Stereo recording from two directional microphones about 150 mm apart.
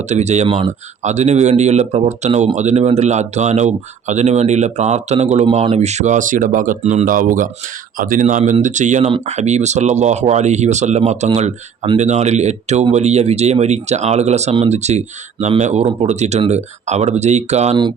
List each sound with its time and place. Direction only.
0.1 s speech: 50° right (ahead or behind)
0.4 s speech: 35° right (ahead or behind)
1.0 s speech: 50° right (ahead or behind)
8.4 s speech: 50° right (ahead or behind)